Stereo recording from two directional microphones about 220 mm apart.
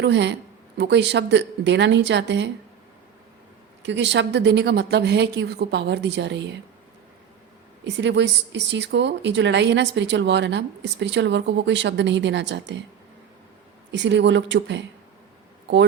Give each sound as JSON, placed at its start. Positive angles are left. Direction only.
{"t": 0.0, "sound": "a woman's voice", "side_deg": -55}
{"t": 3.8, "sound": "a woman's voice", "side_deg": -55}
{"t": 7.9, "sound": "a woman's voice", "side_deg": -55}
{"t": 13.9, "sound": "a woman's voice", "side_deg": -55}